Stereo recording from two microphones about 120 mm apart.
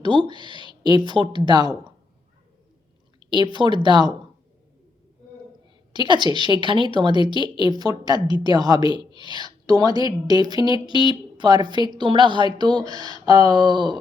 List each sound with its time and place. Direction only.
0.0 s a woman's voice: 40° right (ahead or behind)
3.2 s a woman's voice: 40° right (ahead or behind)
5.9 s a woman's voice: 40° right (ahead or behind)